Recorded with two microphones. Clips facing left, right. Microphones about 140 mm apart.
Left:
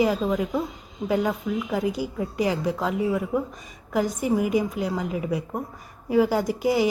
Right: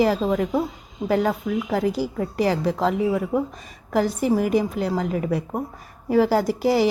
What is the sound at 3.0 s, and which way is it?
Speech, 5° right (ahead or behind).